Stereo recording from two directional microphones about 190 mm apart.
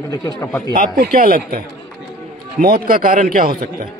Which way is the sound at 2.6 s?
50° right (ahead or behind).